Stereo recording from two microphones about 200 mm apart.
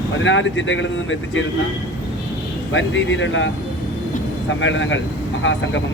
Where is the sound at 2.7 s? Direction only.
70° left (ahead or behind).